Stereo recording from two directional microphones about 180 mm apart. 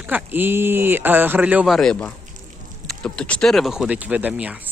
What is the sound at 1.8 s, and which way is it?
Speech, 5° left (ahead or behind).